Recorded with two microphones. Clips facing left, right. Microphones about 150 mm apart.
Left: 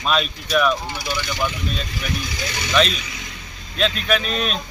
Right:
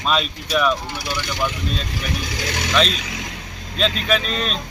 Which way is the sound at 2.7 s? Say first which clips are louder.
Left 1 dB; 5° left (ahead or behind).